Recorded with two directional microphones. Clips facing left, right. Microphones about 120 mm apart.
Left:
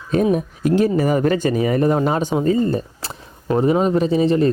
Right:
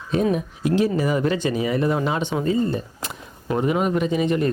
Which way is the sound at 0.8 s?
45° left (ahead or behind).